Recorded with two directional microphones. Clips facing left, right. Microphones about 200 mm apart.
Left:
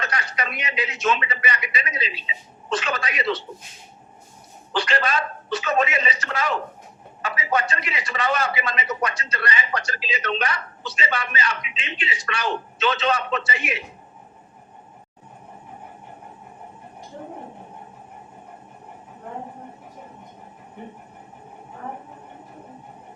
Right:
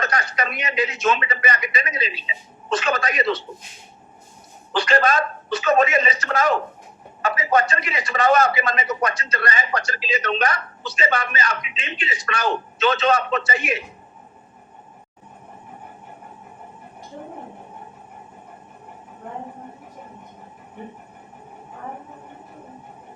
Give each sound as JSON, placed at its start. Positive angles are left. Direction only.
{"t": 0.0, "sound": "a man's voice", "side_deg": -45}
{"t": 4.7, "sound": "a man's voice", "side_deg": -45}